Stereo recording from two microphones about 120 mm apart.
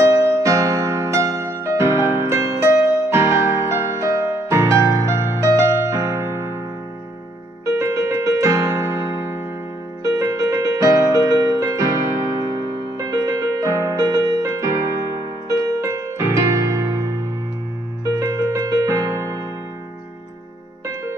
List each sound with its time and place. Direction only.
0.0 s music: 25° right (ahead or behind)
7.6 s keyboard: 25° right (ahead or behind)
10.0 s music: 30° right (ahead or behind)